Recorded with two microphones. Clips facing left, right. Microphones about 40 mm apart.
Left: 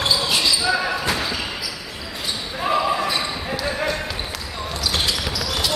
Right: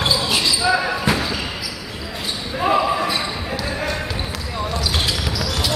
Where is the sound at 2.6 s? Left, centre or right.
Centre.